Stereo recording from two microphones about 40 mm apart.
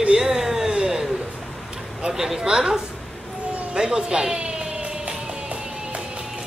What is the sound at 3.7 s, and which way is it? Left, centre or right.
Music, centre.